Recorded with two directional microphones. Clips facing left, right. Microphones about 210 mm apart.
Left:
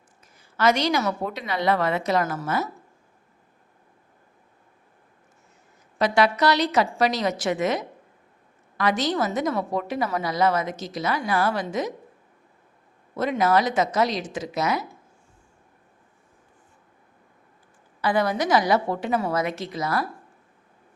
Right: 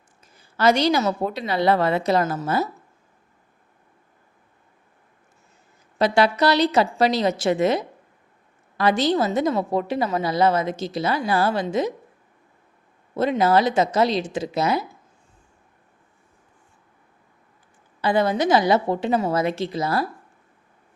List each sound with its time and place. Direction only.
0.3 s a woman's voice: 30° right (ahead or behind)
6.0 s a woman's voice: 30° right (ahead or behind)
13.1 s a woman's voice: 30° right (ahead or behind)
18.0 s a woman's voice: 25° right (ahead or behind)